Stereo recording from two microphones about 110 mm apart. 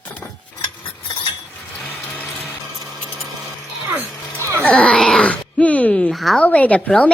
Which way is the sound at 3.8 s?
15° right (ahead or behind).